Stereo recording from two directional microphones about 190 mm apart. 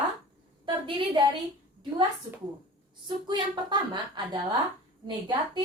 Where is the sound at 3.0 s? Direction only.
25° right (ahead or behind).